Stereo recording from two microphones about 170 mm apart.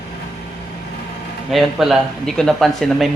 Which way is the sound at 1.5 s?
Centre (ahead or behind).